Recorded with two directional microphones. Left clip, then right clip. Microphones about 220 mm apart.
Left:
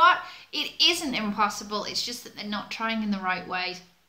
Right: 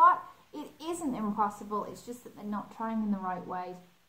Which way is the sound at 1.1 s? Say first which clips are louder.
Left 5 dB; 40° left (ahead or behind).